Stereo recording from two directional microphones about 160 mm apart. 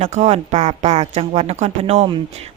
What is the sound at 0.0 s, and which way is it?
Speech, 45° right (ahead or behind).